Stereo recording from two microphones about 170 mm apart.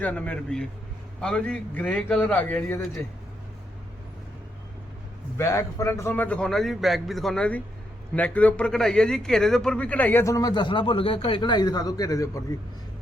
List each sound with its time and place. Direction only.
0.0 s a man's voice: 10° left (ahead or behind)
5.4 s a man's voice: 15° left (ahead or behind)